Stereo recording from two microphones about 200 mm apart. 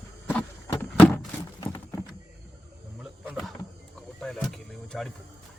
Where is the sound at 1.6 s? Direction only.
20° left (ahead or behind).